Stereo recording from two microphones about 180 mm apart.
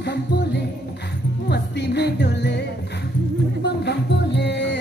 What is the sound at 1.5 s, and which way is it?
Music, 70° left (ahead or behind).